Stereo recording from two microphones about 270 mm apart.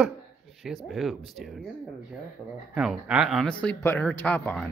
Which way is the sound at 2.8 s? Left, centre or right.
Centre.